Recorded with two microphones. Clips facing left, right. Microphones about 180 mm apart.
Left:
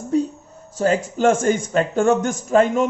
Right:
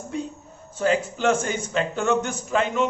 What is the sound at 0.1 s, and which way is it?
Speech, 40° left (ahead or behind).